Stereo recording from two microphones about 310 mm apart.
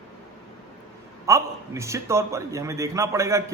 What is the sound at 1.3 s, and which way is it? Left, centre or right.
A man's voice, centre.